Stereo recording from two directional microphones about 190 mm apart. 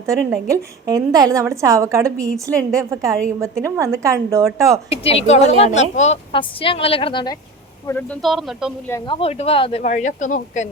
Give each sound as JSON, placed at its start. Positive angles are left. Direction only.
{"t": 0.0, "sound": "a woman's voice", "side_deg": -15}
{"t": 4.9, "sound": "a woman's voice", "side_deg": 30}
{"t": 7.9, "sound": "speech", "side_deg": 10}
{"t": 9.0, "sound": "speech", "side_deg": 30}
{"t": 9.9, "sound": "speech", "side_deg": 40}